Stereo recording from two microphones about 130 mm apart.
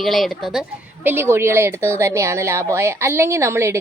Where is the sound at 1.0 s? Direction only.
15° right (ahead or behind).